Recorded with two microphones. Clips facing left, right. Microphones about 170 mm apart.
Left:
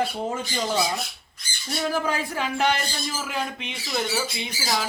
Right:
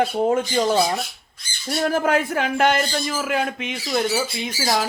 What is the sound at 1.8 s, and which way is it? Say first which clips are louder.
Speech: right 6 dB; 65° right (ahead or behind).